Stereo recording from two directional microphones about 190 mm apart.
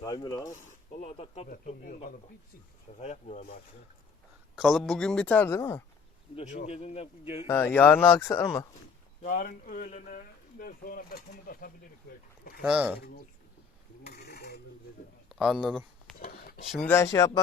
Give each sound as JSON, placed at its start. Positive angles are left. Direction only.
{"t": 0.0, "sound": "speech", "side_deg": 20}
{"t": 0.5, "sound": "speech", "side_deg": 40}
{"t": 1.5, "sound": "speech", "side_deg": 45}
{"t": 4.5, "sound": "speech", "side_deg": 0}
{"t": 6.3, "sound": "speech", "side_deg": 40}
{"t": 7.4, "sound": "speech", "side_deg": 10}
{"t": 9.2, "sound": "speech", "side_deg": 45}
{"t": 12.6, "sound": "speech", "side_deg": -5}
{"t": 14.0, "sound": "mechanisms", "side_deg": 55}
{"t": 15.3, "sound": "speech", "side_deg": -5}
{"t": 16.7, "sound": "speech", "side_deg": 10}